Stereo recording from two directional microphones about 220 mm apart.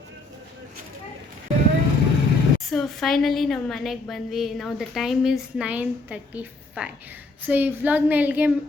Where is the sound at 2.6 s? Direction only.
Centre (ahead or behind).